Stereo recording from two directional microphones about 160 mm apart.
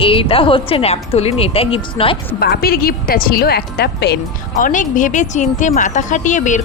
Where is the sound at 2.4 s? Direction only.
75° left (ahead or behind); by 4.2 s 90° left.